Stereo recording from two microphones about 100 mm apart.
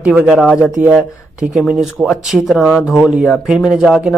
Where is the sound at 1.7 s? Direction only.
5° right (ahead or behind).